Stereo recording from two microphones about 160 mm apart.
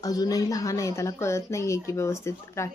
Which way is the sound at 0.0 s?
25° left (ahead or behind).